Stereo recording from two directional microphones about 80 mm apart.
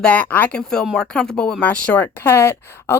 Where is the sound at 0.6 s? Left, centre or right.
Centre.